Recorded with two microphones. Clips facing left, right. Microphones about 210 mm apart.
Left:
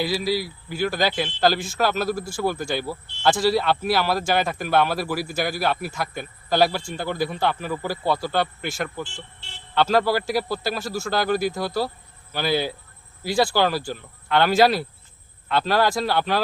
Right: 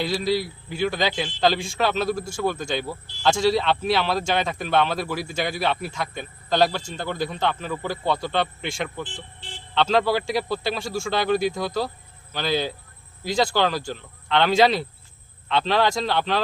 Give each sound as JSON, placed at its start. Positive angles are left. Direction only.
{"t": 0.0, "sound": "a man's voice", "side_deg": 5}
{"t": 9.0, "sound": "speech", "side_deg": -15}
{"t": 9.7, "sound": "a man's voice", "side_deg": 5}